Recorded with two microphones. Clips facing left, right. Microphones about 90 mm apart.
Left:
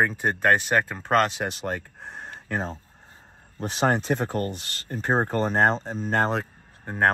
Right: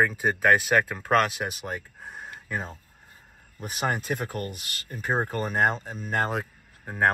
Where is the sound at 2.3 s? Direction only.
30° left (ahead or behind).